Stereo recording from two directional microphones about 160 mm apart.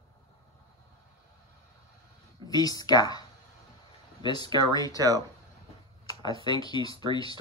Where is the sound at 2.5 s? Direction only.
25° left (ahead or behind).